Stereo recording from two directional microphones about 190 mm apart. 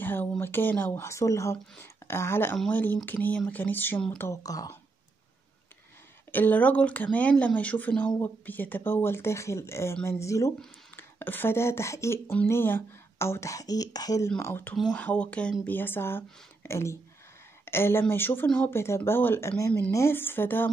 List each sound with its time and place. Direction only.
0.0 s speech: 10° left (ahead or behind)
4.3 s speech: 20° left (ahead or behind)
6.3 s speech: 10° left (ahead or behind)